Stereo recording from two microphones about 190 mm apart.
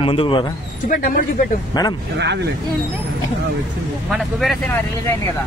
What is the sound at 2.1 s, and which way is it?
Speech, 65° right (ahead or behind).